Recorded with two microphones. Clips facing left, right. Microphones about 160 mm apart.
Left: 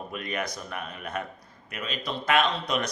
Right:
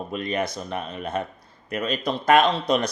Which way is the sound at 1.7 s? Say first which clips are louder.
Right 8 dB; 40° right (ahead or behind).